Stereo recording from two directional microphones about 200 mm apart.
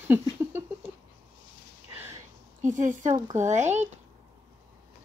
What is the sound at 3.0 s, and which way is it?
Speech, 15° right (ahead or behind).